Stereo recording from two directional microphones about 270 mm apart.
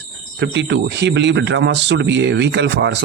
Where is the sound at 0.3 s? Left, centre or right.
Right.